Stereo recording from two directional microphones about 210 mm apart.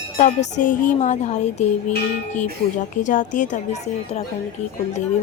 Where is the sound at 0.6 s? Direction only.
40° left (ahead or behind).